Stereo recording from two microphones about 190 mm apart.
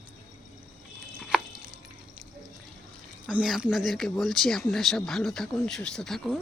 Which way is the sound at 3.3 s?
5° right (ahead or behind).